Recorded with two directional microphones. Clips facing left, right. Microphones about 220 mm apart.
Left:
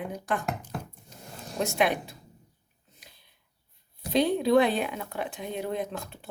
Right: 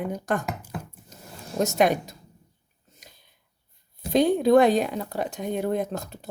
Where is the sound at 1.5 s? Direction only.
40° right (ahead or behind).